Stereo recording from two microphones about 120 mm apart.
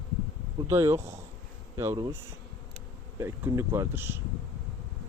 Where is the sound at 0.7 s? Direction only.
25° right (ahead or behind).